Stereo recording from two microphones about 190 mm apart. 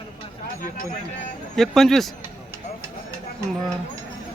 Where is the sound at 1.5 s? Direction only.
Centre (ahead or behind).